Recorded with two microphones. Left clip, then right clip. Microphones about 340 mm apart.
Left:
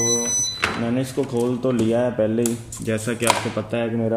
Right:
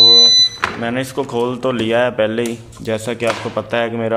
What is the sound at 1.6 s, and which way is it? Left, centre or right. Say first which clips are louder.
Speech: right 3 dB; right.